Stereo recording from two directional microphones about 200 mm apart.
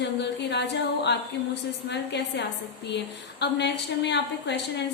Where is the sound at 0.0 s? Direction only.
60° left (ahead or behind).